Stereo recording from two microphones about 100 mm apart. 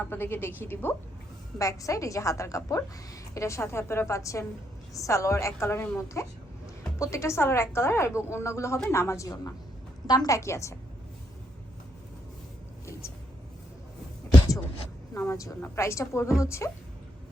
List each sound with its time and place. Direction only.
0.0 s a woman's voice: 20° left (ahead or behind)
1.5 s a woman's voice: 30° left (ahead or behind)
15.3 s a woman's voice: 30° left (ahead or behind)